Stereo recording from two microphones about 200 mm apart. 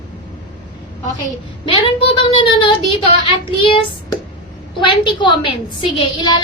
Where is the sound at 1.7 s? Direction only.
25° left (ahead or behind).